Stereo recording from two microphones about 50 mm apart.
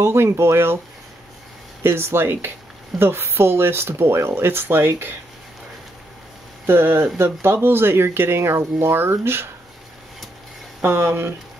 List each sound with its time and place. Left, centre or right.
0.0 s speech: right
1.8 s speech: right
6.6 s speech: right
10.8 s speech: right